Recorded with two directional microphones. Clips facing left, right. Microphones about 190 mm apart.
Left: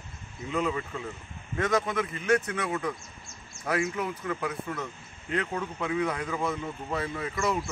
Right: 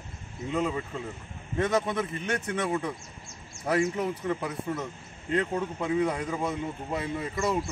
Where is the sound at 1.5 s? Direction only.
25° right (ahead or behind).